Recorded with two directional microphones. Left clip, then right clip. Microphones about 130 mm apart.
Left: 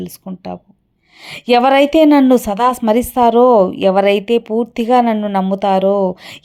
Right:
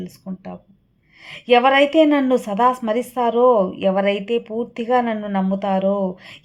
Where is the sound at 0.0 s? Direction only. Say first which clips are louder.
Left 6 dB; 35° left (ahead or behind).